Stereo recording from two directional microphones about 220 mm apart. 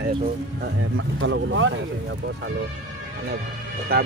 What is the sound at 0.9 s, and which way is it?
Speech, 60° right (ahead or behind).